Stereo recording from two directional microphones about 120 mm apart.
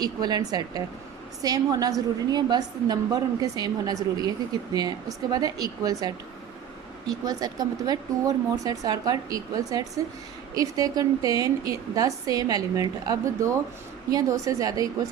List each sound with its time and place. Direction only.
0.0 s a woman's voice: 35° right (ahead or behind)